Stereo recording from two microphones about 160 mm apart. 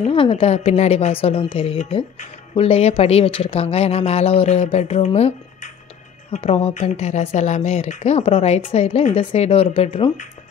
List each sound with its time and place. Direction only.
0.0 s speech: 35° left (ahead or behind)